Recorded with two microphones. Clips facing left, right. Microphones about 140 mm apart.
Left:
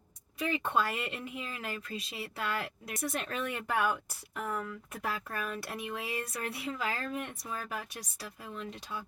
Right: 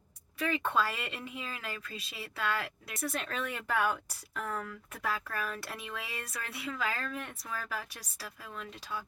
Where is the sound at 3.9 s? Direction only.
10° left (ahead or behind).